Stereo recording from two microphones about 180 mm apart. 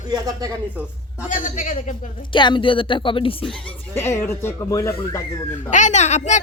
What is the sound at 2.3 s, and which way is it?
Speech, 25° left (ahead or behind).